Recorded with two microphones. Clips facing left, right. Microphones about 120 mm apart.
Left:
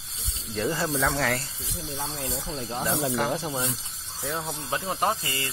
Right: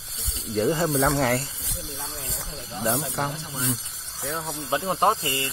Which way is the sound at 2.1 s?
90° left.